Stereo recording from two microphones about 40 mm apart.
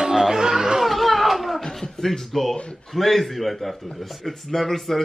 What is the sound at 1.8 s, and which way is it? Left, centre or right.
Speech, centre.